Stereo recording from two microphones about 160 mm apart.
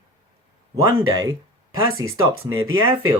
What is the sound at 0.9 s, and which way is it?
Speech, 25° right (ahead or behind).